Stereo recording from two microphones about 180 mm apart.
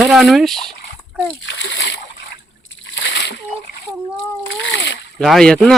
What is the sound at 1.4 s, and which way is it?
Splash, 90° left.